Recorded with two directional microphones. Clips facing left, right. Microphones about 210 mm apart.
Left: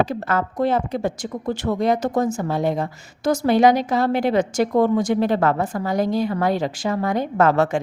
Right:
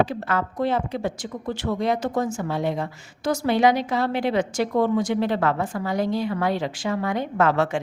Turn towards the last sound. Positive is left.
turn(degrees=40)  # may be behind; listen again after turning